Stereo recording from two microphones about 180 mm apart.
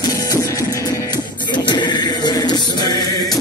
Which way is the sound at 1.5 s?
25° left (ahead or behind).